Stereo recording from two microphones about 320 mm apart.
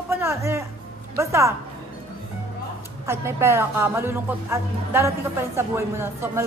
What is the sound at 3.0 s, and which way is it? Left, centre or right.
A woman's voice, centre.